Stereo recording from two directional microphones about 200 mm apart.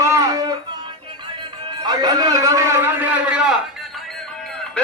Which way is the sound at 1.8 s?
20° right (ahead or behind).